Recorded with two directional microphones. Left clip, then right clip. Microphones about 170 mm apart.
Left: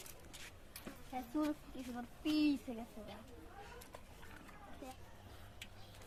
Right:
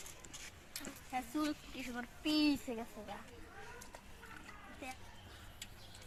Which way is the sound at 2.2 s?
20° right (ahead or behind).